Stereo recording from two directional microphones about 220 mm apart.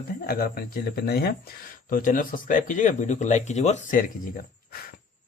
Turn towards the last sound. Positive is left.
turn(degrees=40)  # may be behind; listen again after turning